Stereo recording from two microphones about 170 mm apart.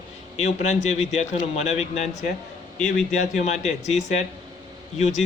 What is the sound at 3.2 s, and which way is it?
A man's voice, 45° left (ahead or behind).